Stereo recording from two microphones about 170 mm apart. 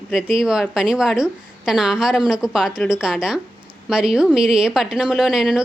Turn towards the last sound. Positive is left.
turn(degrees=-5)  # may be behind; listen again after turning